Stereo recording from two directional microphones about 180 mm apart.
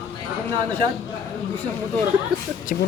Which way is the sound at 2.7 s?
50° left (ahead or behind).